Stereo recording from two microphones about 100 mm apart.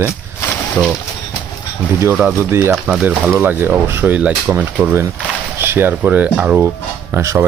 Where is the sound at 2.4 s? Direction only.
25° right (ahead or behind).